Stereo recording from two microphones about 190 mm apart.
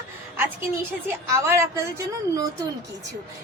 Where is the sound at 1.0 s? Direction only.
15° right (ahead or behind).